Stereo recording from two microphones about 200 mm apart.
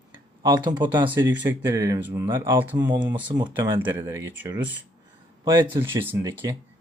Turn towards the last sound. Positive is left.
turn(degrees=-15)  # may be behind; listen again after turning